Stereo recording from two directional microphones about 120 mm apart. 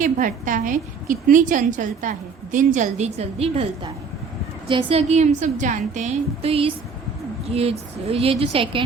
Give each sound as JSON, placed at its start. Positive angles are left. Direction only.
{"t": 0.0, "sound": "a woman's voice", "side_deg": -90}
{"t": 4.7, "sound": "a woman's voice", "side_deg": -50}
{"t": 6.5, "sound": "a woman's voice", "side_deg": -50}